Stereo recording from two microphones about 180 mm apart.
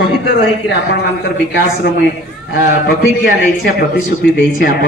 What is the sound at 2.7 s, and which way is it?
Speech, 70° left (ahead or behind).